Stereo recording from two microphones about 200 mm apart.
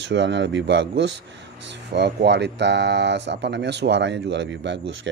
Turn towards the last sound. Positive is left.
turn(degrees=-65)  # may be behind; listen again after turning